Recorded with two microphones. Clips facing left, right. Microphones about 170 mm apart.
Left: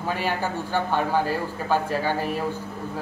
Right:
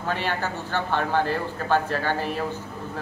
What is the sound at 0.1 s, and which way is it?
A man's voice, 10° left (ahead or behind).